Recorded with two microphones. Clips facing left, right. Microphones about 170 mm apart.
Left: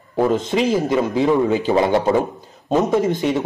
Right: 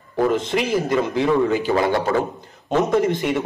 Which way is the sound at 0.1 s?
15° left (ahead or behind).